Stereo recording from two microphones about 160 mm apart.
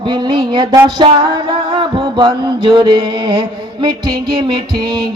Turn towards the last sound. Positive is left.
turn(degrees=-30)  # may be behind; listen again after turning